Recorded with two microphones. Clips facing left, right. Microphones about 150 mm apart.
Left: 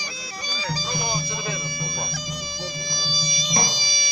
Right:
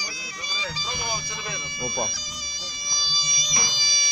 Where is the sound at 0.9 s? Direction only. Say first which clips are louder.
Left 4 dB; 5° right (ahead or behind).